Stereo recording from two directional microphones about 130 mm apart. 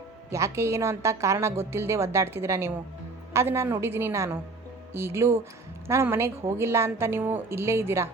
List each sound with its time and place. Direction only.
0.3 s a woman's voice: 20° right (ahead or behind)